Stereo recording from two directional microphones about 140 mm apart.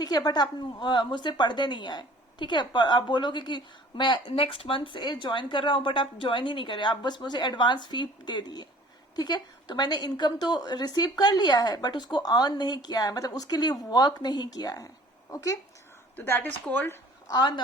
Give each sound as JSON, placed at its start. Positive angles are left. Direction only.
{"t": 0.0, "sound": "a woman's voice", "side_deg": 30}
{"t": 17.2, "sound": "a woman's voice", "side_deg": 30}